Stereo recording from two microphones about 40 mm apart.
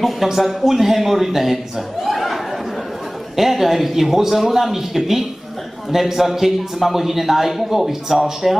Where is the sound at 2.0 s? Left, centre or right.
Centre.